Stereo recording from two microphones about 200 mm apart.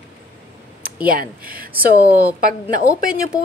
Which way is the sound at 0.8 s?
45° right (ahead or behind).